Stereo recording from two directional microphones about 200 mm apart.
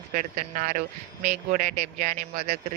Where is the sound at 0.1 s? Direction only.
35° right (ahead or behind).